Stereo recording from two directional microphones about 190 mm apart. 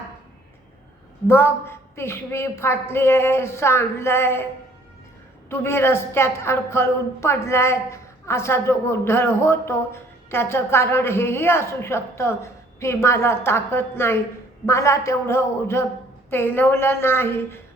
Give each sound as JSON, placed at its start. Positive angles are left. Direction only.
{"t": 1.3, "sound": "a woman's voice", "side_deg": 10}
{"t": 5.5, "sound": "a woman's voice", "side_deg": 15}